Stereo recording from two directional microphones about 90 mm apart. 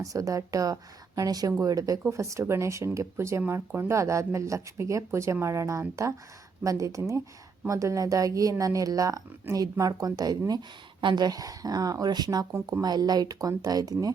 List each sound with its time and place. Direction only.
0.0 s speech: 40° right (ahead or behind)
12.5 s speech: 25° right (ahead or behind)
12.8 s speech: 50° right (ahead or behind)